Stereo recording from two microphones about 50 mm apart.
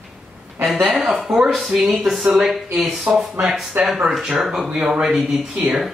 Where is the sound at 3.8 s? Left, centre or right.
Right.